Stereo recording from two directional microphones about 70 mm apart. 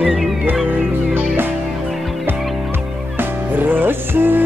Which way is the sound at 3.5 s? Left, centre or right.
Right.